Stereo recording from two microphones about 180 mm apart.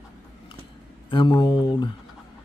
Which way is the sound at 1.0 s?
25° left (ahead or behind).